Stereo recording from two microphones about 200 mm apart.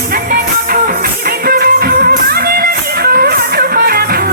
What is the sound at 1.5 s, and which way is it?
Music, 50° right (ahead or behind).